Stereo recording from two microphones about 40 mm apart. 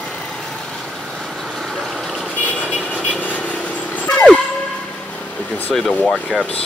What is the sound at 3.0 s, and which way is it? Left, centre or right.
Vehicle, left.